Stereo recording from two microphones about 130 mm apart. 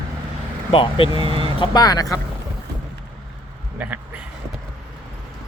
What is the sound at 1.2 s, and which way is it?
Speech, 40° right (ahead or behind).